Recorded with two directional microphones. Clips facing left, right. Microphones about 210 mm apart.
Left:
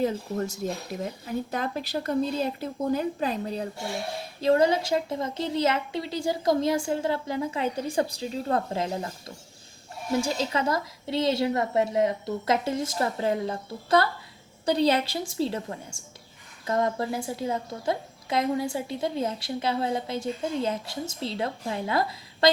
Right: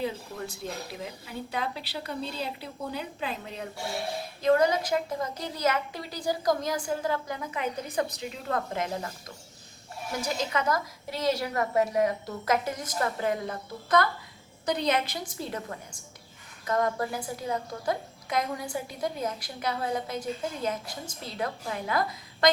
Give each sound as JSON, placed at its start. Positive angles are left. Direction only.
{"t": 0.0, "sound": "a woman's voice", "side_deg": 45}
{"t": 10.2, "sound": "a woman's voice", "side_deg": 30}